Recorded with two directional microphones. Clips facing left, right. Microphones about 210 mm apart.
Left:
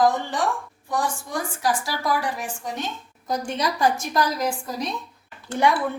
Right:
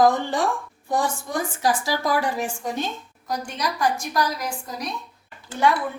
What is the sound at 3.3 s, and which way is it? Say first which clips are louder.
A woman's voice: left 3 dB; 25° left (ahead or behind).